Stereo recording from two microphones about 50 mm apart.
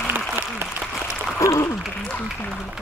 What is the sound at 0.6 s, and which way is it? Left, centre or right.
Applause, right.